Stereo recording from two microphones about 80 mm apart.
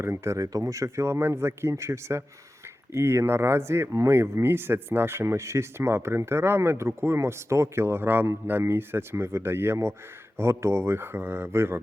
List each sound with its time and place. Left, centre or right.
0.0 s speech: right